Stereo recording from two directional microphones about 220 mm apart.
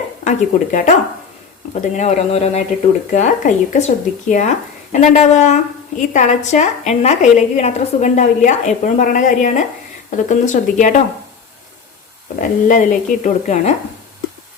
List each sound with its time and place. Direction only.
0.3 s a woman's voice: 35° left (ahead or behind)
2.0 s a woman's voice: 30° left (ahead or behind)
12.4 s a woman's voice: 35° left (ahead or behind)